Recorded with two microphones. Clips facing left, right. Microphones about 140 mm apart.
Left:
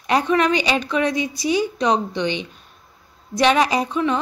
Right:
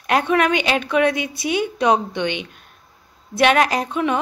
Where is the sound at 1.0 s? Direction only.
60° right (ahead or behind).